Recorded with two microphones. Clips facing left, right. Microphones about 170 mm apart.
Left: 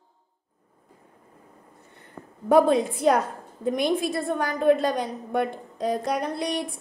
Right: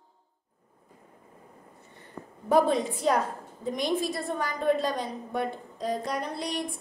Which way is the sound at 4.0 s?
55° left (ahead or behind).